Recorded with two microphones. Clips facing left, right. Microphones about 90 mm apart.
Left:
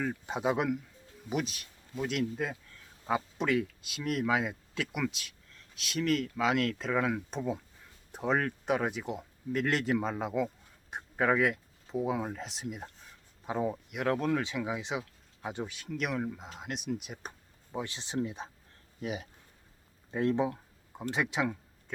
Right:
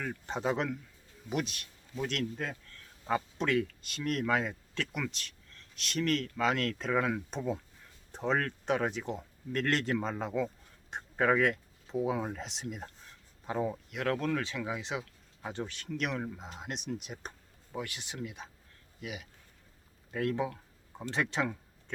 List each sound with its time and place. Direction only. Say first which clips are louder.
0.0 s speech: left 2 dB; 10° left (ahead or behind)
17.7 s speech: left 2 dB; 25° left (ahead or behind)
20.1 s speech: left 3 dB; 25° left (ahead or behind)
21.1 s speech: left 1 dB; 10° left (ahead or behind)